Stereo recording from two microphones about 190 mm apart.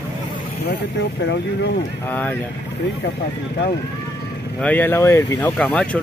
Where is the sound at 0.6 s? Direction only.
65° left (ahead or behind).